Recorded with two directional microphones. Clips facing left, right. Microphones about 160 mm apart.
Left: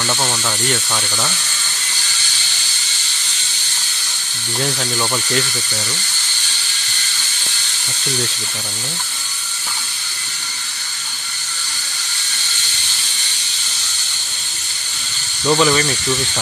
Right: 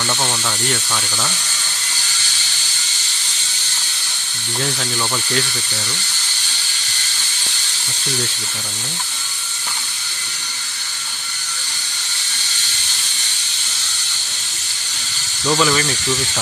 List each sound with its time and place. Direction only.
0.1 s speech: 5° left (ahead or behind)
15.4 s speech: 10° left (ahead or behind)